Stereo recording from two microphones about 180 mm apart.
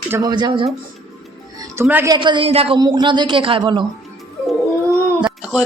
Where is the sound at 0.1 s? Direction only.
20° right (ahead or behind).